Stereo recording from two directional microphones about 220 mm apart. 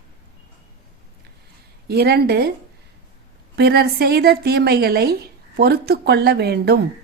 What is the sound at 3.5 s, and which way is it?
A woman's voice, 45° right (ahead or behind).